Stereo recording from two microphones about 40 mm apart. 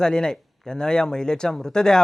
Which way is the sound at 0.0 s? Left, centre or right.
Centre.